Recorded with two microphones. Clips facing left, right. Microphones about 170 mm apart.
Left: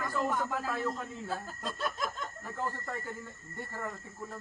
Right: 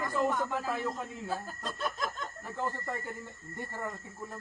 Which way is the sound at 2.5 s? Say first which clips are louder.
Right 2 dB; 10° right (ahead or behind).